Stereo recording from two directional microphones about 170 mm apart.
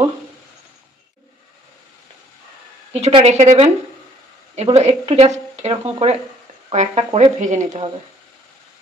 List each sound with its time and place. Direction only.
2.9 s speech: 35° right (ahead or behind)